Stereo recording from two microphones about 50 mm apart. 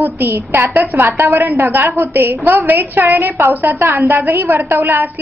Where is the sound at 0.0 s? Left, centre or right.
Right.